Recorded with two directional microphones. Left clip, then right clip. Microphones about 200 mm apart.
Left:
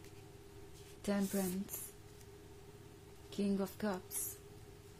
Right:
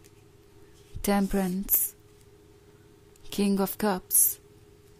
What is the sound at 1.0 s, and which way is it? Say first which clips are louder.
Speech: right 12 dB; 45° right (ahead or behind).